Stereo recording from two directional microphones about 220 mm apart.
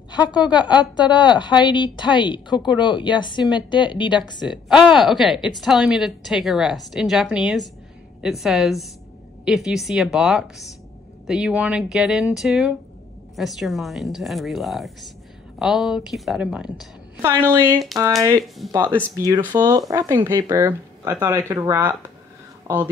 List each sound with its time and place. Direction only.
0.1 s a woman's voice: 20° left (ahead or behind)
4.5 s a woman's voice: 5° right (ahead or behind)
18.6 s a woman's voice: centre (ahead or behind)
19.1 s speech: 15° right (ahead or behind)